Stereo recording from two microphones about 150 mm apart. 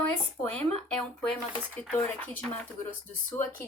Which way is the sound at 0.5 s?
5° left (ahead or behind).